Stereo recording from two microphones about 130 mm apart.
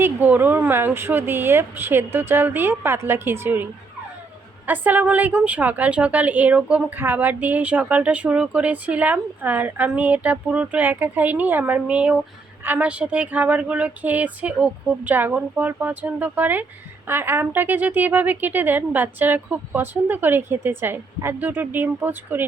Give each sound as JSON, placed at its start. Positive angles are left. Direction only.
{"t": 0.0, "sound": "a woman's voice", "side_deg": -15}